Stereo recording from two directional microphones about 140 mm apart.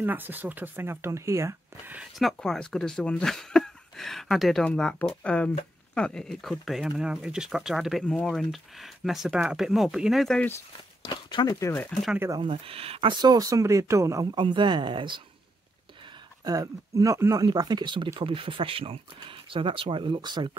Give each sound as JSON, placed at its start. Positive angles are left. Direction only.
{"t": 0.0, "sound": "speech", "side_deg": -15}
{"t": 2.0, "sound": "speech", "side_deg": 0}
{"t": 11.1, "sound": "speech", "side_deg": 30}
{"t": 12.4, "sound": "speech", "side_deg": -40}
{"t": 14.4, "sound": "speech", "side_deg": -35}
{"t": 16.4, "sound": "speech", "side_deg": -25}